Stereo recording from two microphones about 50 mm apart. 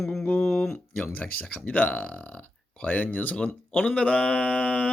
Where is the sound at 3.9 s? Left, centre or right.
Left.